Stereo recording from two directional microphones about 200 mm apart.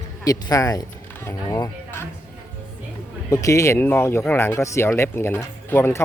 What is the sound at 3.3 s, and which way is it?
Speech, 15° left (ahead or behind).